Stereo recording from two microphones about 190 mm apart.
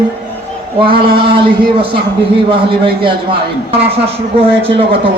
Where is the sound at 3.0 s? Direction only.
30° right (ahead or behind).